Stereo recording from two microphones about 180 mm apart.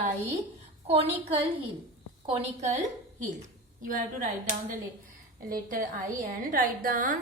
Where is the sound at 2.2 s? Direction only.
35° right (ahead or behind).